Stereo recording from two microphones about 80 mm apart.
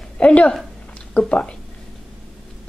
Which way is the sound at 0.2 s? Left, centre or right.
Centre.